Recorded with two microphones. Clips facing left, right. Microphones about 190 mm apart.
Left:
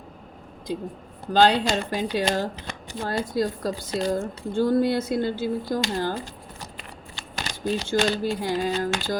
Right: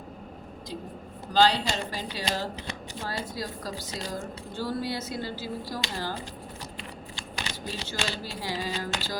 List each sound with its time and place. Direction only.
1.3 s speech: 55° left (ahead or behind)